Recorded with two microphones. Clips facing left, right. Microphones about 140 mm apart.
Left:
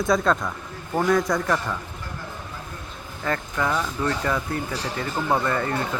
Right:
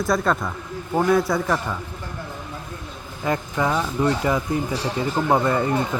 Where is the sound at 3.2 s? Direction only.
15° right (ahead or behind).